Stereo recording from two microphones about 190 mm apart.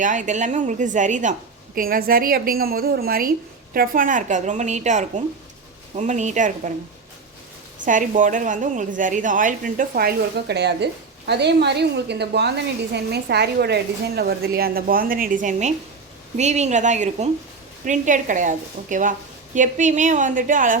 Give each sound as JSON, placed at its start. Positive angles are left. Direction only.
{"t": 0.0, "sound": "a woman's voice", "side_deg": -40}
{"t": 7.9, "sound": "a woman's voice", "side_deg": -45}